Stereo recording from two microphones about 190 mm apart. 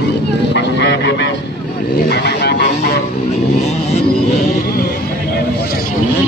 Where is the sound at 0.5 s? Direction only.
65° left (ahead or behind).